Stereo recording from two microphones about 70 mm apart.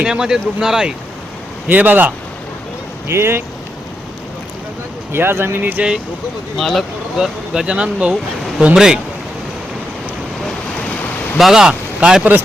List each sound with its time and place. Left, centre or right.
0.0 s speech: centre
1.6 s speech: right
3.1 s speech: right
5.1 s speech: right
6.6 s speech: centre
7.2 s speech: centre
11.3 s speech: centre
11.7 s a sound: centre